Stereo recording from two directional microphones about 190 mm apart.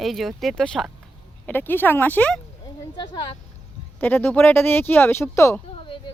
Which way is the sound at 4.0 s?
10° left (ahead or behind).